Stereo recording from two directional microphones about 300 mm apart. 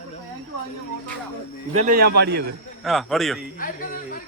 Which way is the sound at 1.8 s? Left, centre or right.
Right.